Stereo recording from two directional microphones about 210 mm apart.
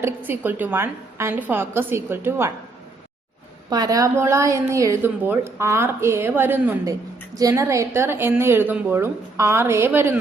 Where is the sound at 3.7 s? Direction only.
15° right (ahead or behind).